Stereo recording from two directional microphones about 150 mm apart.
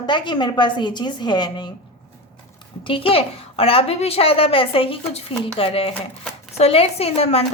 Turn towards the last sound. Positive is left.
turn(degrees=40)  # may be behind; listen again after turning